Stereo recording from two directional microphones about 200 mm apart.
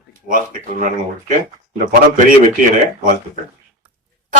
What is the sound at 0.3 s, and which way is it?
Speech, 40° right (ahead or behind).